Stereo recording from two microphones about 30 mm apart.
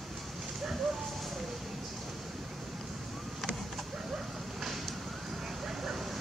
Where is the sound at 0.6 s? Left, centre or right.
Centre.